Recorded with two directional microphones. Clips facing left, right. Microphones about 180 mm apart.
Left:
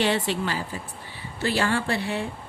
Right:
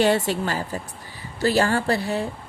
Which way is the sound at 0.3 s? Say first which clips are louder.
Right 2 dB; 45° right (ahead or behind).